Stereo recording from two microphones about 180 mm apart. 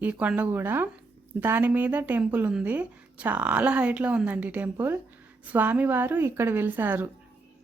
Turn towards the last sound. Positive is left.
turn(degrees=-10)  # may be behind; listen again after turning